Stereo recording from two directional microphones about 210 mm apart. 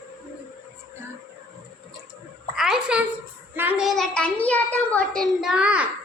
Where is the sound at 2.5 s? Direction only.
5° right (ahead or behind).